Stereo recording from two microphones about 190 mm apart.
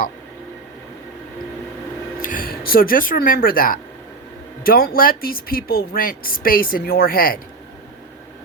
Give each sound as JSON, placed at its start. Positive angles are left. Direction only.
{"t": 2.2, "sound": "speech", "side_deg": 50}